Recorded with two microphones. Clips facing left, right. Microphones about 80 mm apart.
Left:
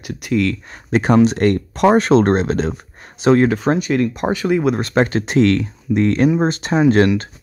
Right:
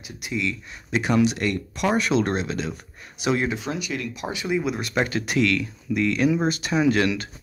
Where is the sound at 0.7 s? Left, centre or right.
Left.